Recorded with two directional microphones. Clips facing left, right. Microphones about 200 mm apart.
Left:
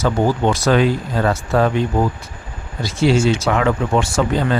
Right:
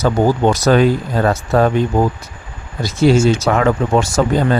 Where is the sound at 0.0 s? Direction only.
40° right (ahead or behind).